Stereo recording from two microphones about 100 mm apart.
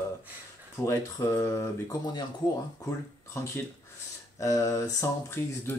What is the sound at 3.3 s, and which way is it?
Speech, 25° left (ahead or behind).